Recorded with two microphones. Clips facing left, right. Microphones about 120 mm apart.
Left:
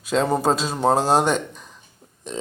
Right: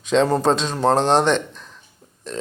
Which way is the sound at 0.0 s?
5° left (ahead or behind).